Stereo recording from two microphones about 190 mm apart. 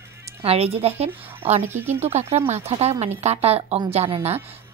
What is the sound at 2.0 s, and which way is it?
A woman's voice, 35° right (ahead or behind).